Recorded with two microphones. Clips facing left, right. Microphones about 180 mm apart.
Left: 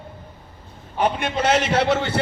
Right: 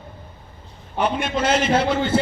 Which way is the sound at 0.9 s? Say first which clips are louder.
Even; 55° left (ahead or behind).